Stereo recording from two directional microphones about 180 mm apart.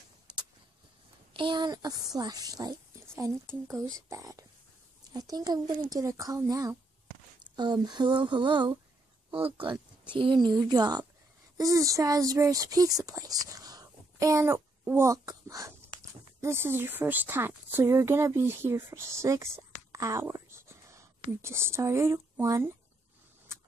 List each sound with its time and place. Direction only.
1.3 s speech: 25° right (ahead or behind)